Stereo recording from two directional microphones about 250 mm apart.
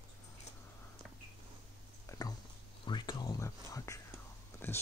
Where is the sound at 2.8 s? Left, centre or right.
Centre.